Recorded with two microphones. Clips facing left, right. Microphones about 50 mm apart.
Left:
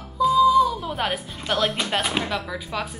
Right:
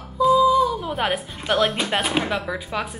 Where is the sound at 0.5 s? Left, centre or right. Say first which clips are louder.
Left 1 dB; centre.